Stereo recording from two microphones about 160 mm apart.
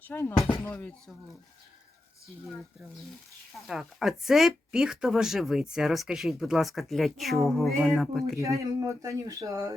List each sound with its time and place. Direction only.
0.0 s speech: 15° left (ahead or behind)
3.7 s speech: centre (ahead or behind)
8.4 s speech: 20° right (ahead or behind)